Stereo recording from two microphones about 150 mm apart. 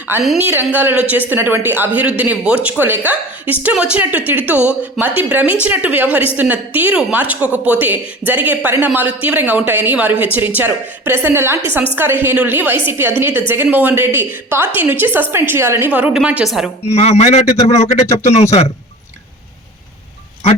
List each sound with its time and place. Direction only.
0.4 s a woman's voice: 10° right (ahead or behind)
16.8 s a man's voice: 45° left (ahead or behind)